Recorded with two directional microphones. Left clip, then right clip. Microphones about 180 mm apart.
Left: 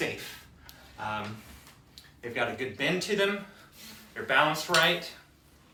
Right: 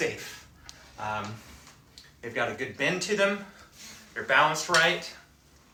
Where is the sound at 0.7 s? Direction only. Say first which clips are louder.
Right 4 dB; 30° left (ahead or behind).